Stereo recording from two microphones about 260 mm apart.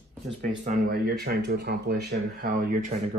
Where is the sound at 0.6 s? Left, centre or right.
Right.